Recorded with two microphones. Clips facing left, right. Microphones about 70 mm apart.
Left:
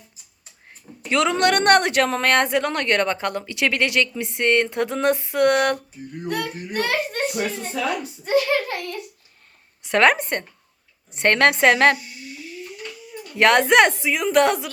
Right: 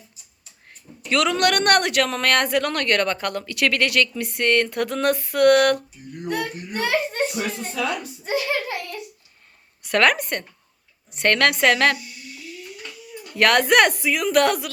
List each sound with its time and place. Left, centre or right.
0.7 s speech: left
6.2 s speech: centre
6.7 s a sound: centre
8.2 s a sound: centre
9.8 s a woman's voice: left
13.3 s speech: left